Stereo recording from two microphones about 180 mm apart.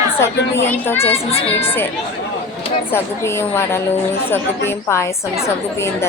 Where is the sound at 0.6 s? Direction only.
10° left (ahead or behind).